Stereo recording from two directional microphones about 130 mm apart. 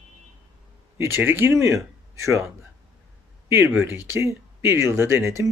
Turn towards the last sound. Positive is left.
turn(degrees=-20)  # may be behind; listen again after turning